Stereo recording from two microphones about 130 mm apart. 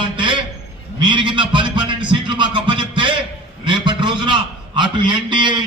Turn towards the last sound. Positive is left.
turn(degrees=-35)  # may be behind; listen again after turning